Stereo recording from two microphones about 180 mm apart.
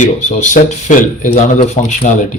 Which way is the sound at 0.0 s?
40° left (ahead or behind).